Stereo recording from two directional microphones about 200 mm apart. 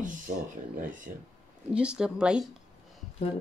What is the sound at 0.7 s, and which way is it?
Speech, 40° right (ahead or behind).